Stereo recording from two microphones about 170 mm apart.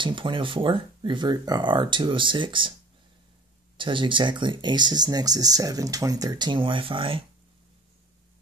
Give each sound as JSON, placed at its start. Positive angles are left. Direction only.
{"t": 0.0, "sound": "speech", "side_deg": -30}
{"t": 3.7, "sound": "speech", "side_deg": -30}